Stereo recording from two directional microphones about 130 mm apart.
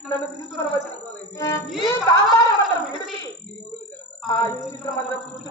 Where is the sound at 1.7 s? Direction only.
Centre (ahead or behind).